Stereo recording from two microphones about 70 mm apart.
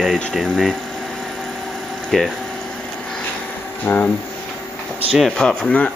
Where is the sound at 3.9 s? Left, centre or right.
Left.